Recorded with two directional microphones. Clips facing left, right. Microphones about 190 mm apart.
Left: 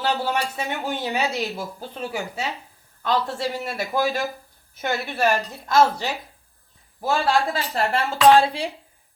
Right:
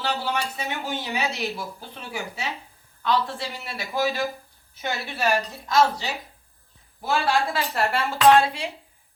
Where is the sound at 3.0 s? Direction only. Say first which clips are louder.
Left 2 dB; 45° left (ahead or behind).